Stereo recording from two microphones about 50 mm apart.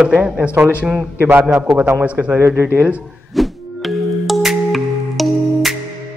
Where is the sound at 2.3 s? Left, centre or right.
Right.